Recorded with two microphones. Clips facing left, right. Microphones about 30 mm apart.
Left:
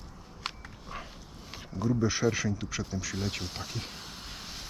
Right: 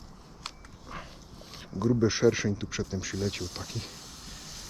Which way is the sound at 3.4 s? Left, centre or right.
Left.